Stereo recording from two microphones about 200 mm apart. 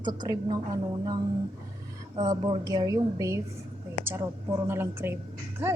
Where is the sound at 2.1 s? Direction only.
20° right (ahead or behind).